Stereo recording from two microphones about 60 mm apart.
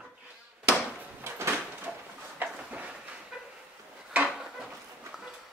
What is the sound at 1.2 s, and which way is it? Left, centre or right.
Door, right.